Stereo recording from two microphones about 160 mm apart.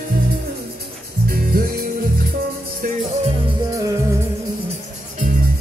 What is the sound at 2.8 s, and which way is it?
Music, 60° right (ahead or behind).